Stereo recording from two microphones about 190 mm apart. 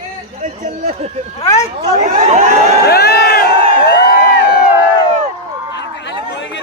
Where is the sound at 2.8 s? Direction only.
55° left (ahead or behind).